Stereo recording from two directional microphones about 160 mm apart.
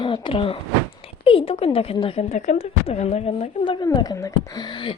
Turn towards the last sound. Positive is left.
turn(degrees=30)  # may be behind; listen again after turning